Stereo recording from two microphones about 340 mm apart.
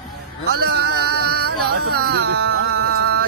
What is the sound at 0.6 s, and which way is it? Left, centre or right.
Music, right.